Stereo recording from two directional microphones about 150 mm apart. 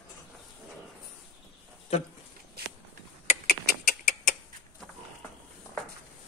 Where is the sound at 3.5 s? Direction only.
70° left (ahead or behind).